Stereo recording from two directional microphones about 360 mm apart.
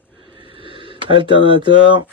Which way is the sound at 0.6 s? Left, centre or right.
Centre.